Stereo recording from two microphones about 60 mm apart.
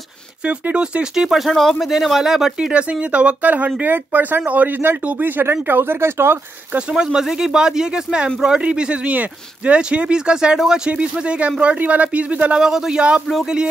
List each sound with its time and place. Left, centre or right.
0.5 s speech: right
1.5 s speech: centre
1.9 s speech: centre
2.7 s speech: centre; by 6.4 s right
6.7 s speech: centre
12.5 s speech: centre